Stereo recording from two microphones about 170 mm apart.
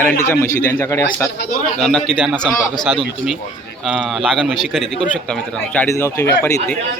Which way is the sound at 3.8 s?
5° right (ahead or behind).